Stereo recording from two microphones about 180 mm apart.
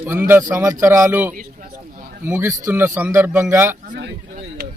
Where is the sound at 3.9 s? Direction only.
50° right (ahead or behind).